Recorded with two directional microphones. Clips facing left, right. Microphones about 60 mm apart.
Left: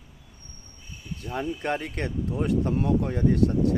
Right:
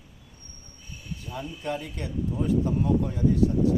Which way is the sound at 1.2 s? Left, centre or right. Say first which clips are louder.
Left 5 dB; left.